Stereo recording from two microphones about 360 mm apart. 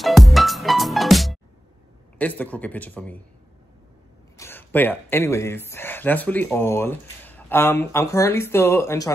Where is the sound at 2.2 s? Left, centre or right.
Centre.